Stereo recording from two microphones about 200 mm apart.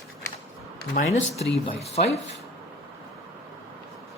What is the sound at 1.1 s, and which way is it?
Speech, 30° left (ahead or behind).